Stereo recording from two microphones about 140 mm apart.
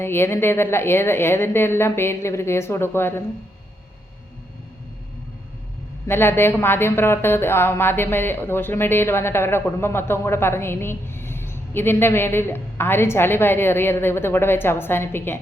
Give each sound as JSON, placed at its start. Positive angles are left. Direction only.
{"t": 0.0, "sound": "speech", "side_deg": 15}
{"t": 6.1, "sound": "speech", "side_deg": 15}